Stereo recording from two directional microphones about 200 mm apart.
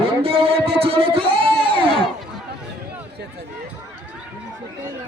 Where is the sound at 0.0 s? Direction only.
30° right (ahead or behind).